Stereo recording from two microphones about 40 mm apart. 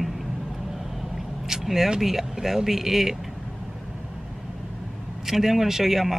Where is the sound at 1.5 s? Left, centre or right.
Centre.